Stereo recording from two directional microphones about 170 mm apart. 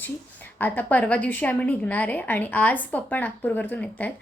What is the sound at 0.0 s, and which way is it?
A woman's voice, 10° left (ahead or behind).